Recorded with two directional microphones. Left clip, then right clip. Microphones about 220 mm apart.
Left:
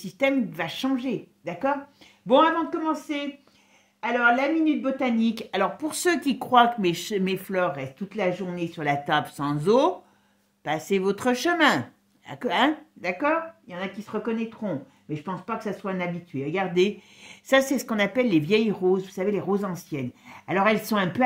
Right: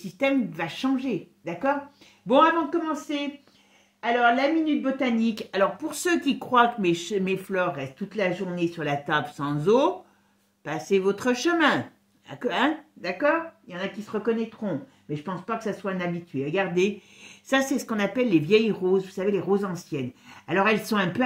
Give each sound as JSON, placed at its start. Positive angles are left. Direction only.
{"t": 0.0, "sound": "speech", "side_deg": 40}